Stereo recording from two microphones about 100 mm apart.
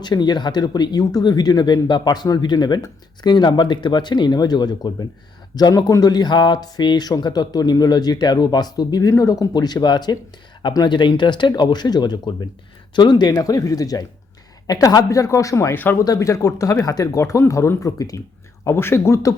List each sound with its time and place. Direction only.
0.0 s speech: 45° left (ahead or behind); by 16.0 s 20° left (ahead or behind)
16.0 s speech: 30° left (ahead or behind)
18.6 s speech: 25° left (ahead or behind)